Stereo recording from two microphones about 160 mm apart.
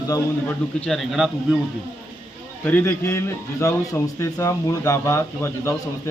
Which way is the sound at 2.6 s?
15° left (ahead or behind).